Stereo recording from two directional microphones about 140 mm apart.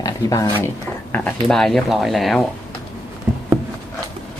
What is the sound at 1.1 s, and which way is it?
Speech, 5° left (ahead or behind).